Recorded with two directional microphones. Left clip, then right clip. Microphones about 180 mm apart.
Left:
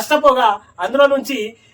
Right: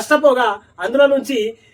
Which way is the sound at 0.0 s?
10° left (ahead or behind).